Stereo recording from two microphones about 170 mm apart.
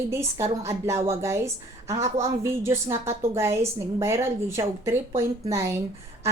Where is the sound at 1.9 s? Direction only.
40° right (ahead or behind).